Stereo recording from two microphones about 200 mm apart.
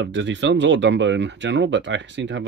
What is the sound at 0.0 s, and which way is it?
Speech, 65° right (ahead or behind).